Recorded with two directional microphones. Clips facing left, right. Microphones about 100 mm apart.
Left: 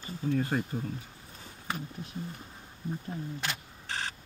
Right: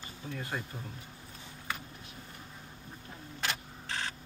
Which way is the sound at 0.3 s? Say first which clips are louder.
Left 9 dB; 35° left (ahead or behind).